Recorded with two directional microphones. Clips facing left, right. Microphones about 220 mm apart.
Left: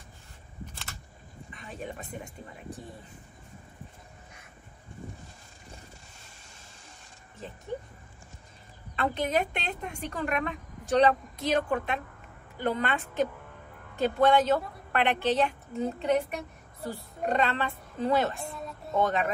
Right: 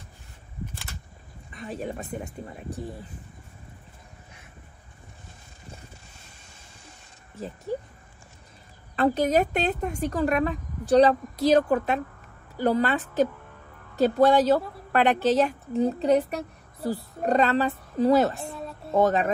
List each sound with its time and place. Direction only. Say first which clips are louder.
1.5 s speech: right 7 dB; 40° right (ahead or behind)
7.3 s speech: right 7 dB; 40° right (ahead or behind)
8.9 s speech: right 6 dB; 40° right (ahead or behind)